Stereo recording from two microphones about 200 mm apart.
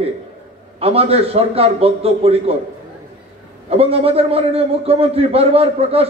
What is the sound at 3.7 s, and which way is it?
A man's voice, 30° right (ahead or behind).